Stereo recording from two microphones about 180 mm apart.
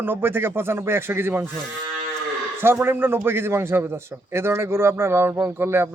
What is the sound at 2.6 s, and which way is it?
A man's voice, 10° right (ahead or behind).